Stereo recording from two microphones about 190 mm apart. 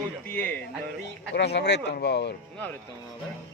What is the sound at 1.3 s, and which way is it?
Speech, 60° left (ahead or behind).